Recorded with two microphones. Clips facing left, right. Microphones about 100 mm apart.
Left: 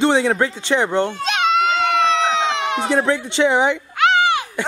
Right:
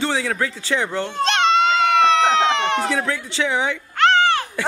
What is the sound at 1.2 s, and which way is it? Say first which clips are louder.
Baby cry: right 1 dB; 5° left (ahead or behind).